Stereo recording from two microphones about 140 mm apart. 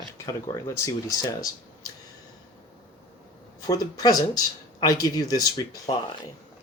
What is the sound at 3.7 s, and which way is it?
Speech, 25° left (ahead or behind).